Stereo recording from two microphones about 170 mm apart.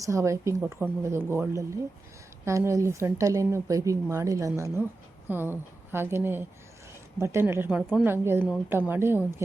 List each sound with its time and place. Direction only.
0.0 s speech: 20° right (ahead or behind)